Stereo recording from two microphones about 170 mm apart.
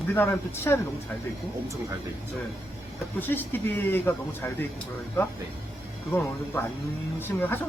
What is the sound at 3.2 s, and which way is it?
Speech, 10° left (ahead or behind).